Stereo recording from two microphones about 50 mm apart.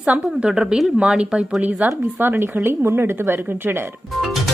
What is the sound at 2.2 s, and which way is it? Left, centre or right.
Speech, right.